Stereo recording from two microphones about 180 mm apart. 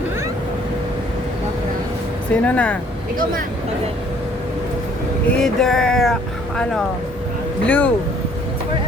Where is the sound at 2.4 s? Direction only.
5° left (ahead or behind).